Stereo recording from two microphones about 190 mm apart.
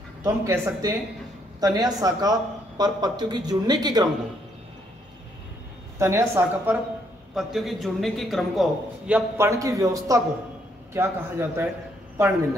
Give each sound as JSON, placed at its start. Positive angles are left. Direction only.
{"t": 0.2, "sound": "a man's voice", "side_deg": -15}
{"t": 5.9, "sound": "a man's voice", "side_deg": -15}
{"t": 7.3, "sound": "a man's voice", "side_deg": 0}